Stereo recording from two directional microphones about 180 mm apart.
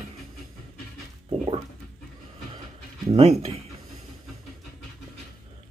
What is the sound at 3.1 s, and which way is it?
Speech, 35° right (ahead or behind).